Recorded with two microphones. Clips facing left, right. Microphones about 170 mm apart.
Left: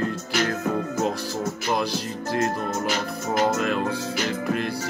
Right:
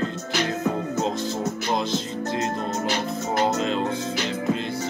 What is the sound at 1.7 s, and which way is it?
Speech, 20° right (ahead or behind).